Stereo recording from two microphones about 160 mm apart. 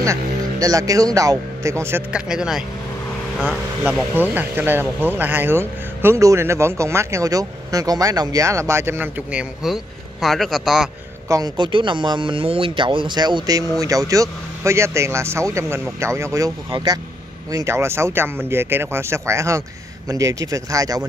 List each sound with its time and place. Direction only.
0.0 s speech: 20° right (ahead or behind); by 10.9 s centre (ahead or behind)
11.2 s speech: 20° right (ahead or behind)